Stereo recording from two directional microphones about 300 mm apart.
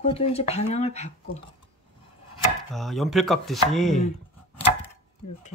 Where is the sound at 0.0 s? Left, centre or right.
Centre.